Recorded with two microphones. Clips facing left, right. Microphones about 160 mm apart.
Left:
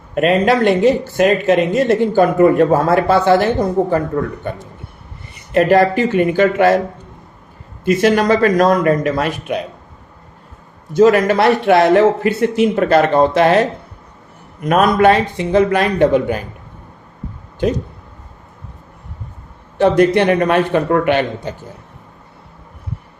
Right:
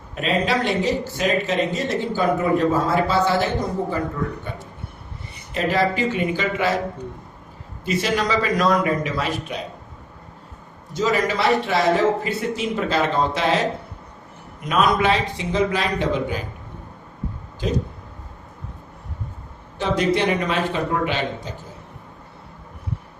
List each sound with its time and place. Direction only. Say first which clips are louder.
0.1 s speech: left 8 dB; 55° left (ahead or behind)
7.9 s a man's voice: left 9 dB; 55° left (ahead or behind)
10.9 s speech: left 10 dB; 60° left (ahead or behind)
17.6 s speech: left 7 dB; 60° left (ahead or behind)
19.8 s speech: left 8 dB; 60° left (ahead or behind)